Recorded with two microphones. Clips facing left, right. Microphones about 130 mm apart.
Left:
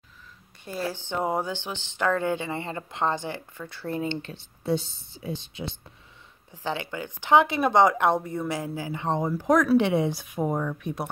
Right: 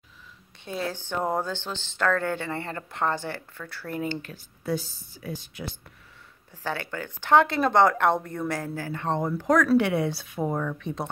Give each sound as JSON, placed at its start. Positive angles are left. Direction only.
{"t": 0.7, "sound": "a woman's voice", "side_deg": 0}
{"t": 0.9, "sound": "speech", "side_deg": 15}